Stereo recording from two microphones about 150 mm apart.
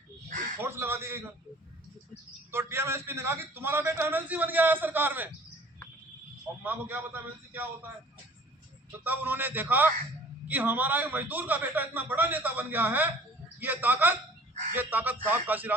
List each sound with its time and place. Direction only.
0.6 s a man's voice: 15° right (ahead or behind)
2.5 s a man's voice: 15° right (ahead or behind)
6.6 s a man's voice: 15° right (ahead or behind)
8.9 s a man's voice: 10° right (ahead or behind)